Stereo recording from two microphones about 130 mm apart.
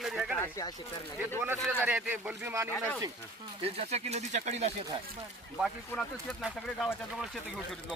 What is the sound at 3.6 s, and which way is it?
Speech, 50° right (ahead or behind).